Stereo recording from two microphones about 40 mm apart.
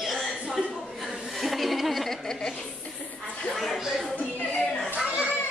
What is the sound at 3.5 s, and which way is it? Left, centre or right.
Speech, centre.